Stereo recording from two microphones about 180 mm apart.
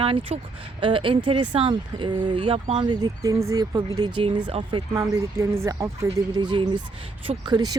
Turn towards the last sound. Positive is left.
turn(degrees=-20)  # may be behind; listen again after turning